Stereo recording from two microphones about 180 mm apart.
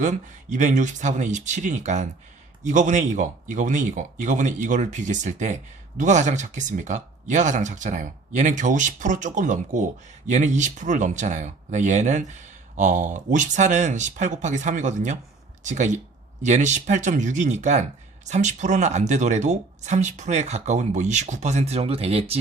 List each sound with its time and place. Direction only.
0.0 s speech: 45° right (ahead or behind)